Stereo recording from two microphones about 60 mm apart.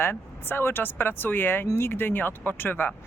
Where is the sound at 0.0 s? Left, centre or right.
Left.